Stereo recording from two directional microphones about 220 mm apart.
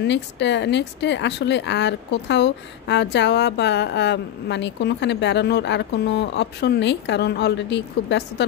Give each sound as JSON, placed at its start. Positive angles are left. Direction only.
{"t": 0.0, "sound": "speech", "side_deg": 50}